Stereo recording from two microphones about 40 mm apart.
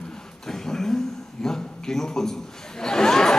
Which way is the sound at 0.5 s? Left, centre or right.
Centre.